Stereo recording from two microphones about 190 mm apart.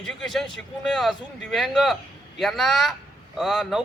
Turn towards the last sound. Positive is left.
turn(degrees=0)  # may be behind; listen again after turning